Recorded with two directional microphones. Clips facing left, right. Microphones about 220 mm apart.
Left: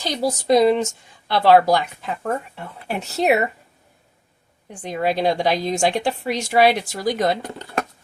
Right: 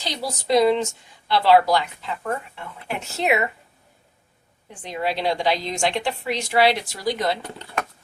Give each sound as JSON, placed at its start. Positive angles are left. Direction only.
{"t": 0.0, "sound": "a woman's voice", "side_deg": 45}
{"t": 4.7, "sound": "a woman's voice", "side_deg": 45}